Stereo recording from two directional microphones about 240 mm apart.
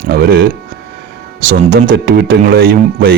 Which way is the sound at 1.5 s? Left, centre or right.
Right.